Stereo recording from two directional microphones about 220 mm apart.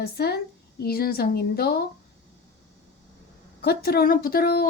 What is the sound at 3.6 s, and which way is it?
A woman's voice, 45° left (ahead or behind).